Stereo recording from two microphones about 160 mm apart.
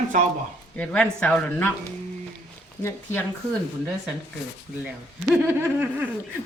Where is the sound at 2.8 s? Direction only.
15° left (ahead or behind).